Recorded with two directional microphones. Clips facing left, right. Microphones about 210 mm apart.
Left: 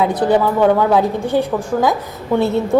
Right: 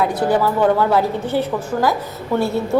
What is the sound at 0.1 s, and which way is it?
A woman's voice, 20° left (ahead or behind).